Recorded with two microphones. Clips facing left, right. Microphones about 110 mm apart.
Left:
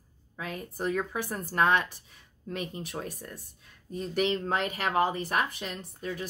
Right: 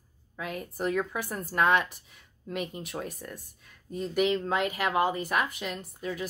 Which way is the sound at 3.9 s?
35° left (ahead or behind).